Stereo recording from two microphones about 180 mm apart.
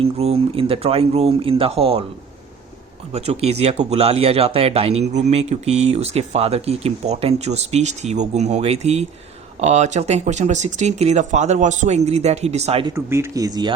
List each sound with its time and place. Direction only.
0.0 s speech: 35° right (ahead or behind)
3.1 s speech: 35° right (ahead or behind)
12.9 s speech: 15° right (ahead or behind)